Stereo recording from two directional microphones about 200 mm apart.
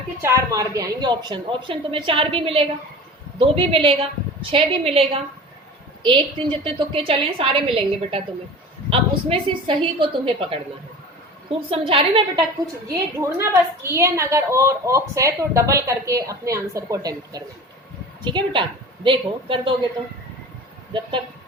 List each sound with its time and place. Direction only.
0.2 s a woman's voice: 15° right (ahead or behind)
12.9 s a woman's voice: 15° right (ahead or behind)